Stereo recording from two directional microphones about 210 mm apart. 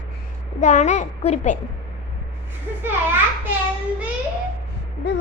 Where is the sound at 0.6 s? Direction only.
35° left (ahead or behind).